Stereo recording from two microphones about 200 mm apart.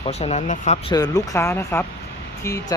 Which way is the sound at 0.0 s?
30° left (ahead or behind).